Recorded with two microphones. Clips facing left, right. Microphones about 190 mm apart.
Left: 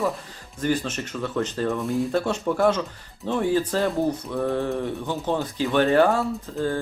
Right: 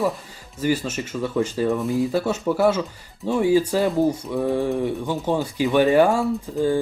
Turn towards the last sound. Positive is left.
turn(degrees=-15)  # may be behind; listen again after turning